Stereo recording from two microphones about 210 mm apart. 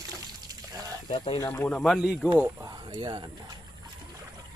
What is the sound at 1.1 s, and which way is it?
Speech, 20° left (ahead or behind).